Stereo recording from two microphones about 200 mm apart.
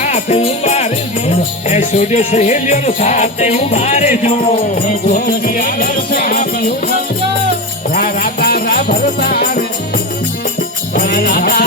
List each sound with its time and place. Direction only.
0.0 s music: 35° left (ahead or behind)
7.9 s music: 50° left (ahead or behind)
10.9 s music: 50° left (ahead or behind)